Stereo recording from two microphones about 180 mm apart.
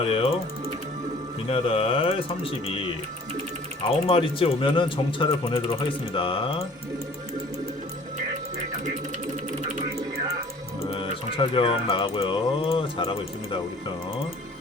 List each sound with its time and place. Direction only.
0.0 s speech: 30° left (ahead or behind)
1.5 s speech: 30° left (ahead or behind)
10.8 s speech: 30° left (ahead or behind)